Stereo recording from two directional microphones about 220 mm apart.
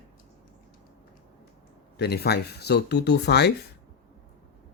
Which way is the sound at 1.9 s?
45° left (ahead or behind).